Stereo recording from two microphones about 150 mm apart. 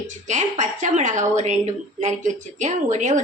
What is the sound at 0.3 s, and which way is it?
A woman's voice, 55° right (ahead or behind).